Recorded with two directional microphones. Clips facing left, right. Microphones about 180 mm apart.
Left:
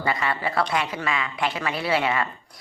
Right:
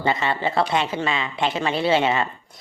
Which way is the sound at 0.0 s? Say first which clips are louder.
Right 3 dB; 25° right (ahead or behind).